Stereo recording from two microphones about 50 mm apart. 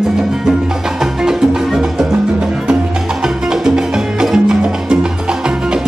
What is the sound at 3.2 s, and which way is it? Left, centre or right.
Music, centre.